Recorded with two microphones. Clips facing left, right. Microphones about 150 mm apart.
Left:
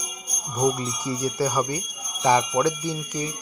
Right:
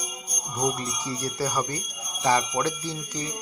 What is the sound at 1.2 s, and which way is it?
Speech, 15° left (ahead or behind).